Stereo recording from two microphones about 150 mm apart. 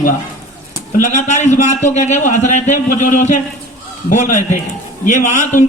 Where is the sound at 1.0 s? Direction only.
55° left (ahead or behind).